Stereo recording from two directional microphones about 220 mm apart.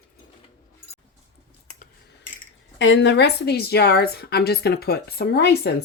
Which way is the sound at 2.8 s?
55° left (ahead or behind).